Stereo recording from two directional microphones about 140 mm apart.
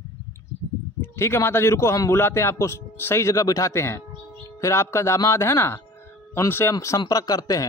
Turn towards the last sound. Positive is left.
turn(degrees=25)  # may be behind; listen again after turning